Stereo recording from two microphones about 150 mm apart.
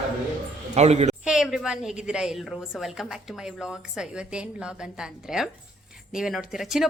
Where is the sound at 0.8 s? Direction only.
45° right (ahead or behind).